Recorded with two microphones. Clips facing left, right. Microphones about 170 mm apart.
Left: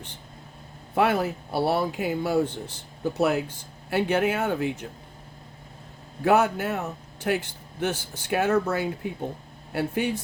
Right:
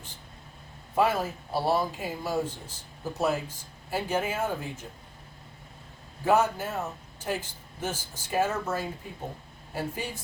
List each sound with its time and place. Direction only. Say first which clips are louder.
0.9 s a man's voice: left 3 dB; 65° left (ahead or behind)
6.2 s a man's voice: left 3 dB; 70° left (ahead or behind)